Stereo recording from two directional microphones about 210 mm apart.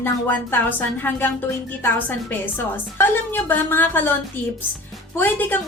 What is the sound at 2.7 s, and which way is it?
A woman's voice, 10° left (ahead or behind).